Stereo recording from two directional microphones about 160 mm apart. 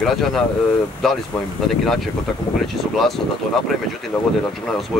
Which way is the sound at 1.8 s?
Centre (ahead or behind).